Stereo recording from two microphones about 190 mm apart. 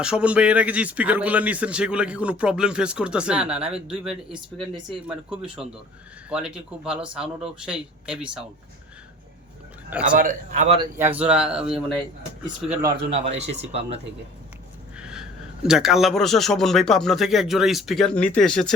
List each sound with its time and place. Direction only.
0.0 s speech: 5° right (ahead or behind)
6.3 s speech: 5° right (ahead or behind)
10.2 s speech: 40° right (ahead or behind)
10.9 s speech: 10° right (ahead or behind)
13.1 s speech: 30° right (ahead or behind)
14.9 s speech: 5° right (ahead or behind)